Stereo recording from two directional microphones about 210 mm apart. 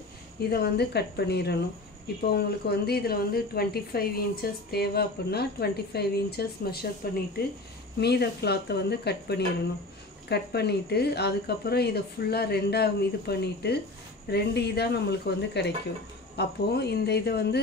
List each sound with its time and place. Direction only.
0.4 s a woman's voice: 50° left (ahead or behind)
8.0 s a woman's voice: 50° left (ahead or behind)